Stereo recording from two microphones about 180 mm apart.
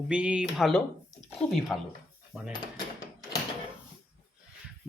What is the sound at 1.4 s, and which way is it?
Speech, 40° left (ahead or behind).